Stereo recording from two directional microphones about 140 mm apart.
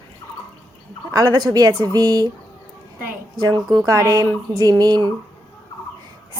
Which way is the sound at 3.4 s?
30° right (ahead or behind).